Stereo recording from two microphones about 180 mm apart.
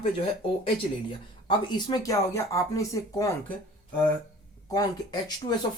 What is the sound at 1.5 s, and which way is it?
Speech, 25° left (ahead or behind).